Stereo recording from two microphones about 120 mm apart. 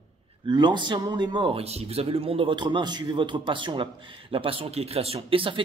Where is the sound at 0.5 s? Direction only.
40° right (ahead or behind).